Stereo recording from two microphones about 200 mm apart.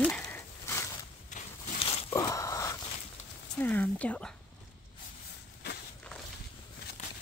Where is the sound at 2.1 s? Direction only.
15° left (ahead or behind).